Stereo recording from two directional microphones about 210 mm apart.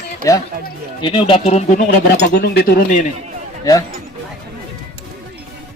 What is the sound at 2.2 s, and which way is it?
Speech, 50° left (ahead or behind).